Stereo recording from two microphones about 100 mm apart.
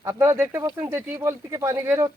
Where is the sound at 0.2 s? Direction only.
25° right (ahead or behind).